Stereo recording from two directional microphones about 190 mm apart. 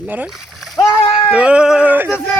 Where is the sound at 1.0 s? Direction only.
30° left (ahead or behind).